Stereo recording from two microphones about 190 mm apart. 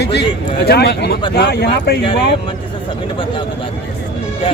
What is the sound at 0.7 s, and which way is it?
Speech, 60° left (ahead or behind).